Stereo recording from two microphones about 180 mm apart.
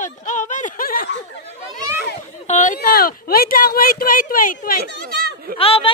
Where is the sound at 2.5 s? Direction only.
45° left (ahead or behind).